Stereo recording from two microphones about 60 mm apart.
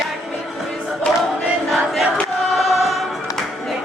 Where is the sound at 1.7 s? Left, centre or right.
Centre.